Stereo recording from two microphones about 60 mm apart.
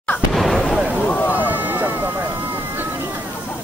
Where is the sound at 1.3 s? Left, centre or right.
Right.